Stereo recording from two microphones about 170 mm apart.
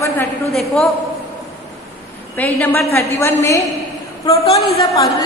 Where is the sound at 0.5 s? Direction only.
Centre (ahead or behind).